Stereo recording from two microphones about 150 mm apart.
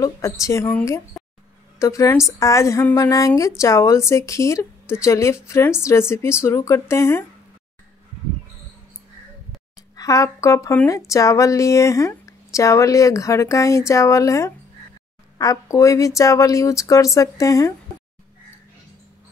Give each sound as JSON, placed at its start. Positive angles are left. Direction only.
{"t": 0.0, "sound": "a woman's voice", "side_deg": 20}
{"t": 9.9, "sound": "a woman's voice", "side_deg": 20}